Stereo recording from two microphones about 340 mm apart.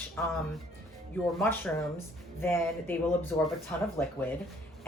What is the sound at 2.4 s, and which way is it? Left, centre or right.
Speech, centre.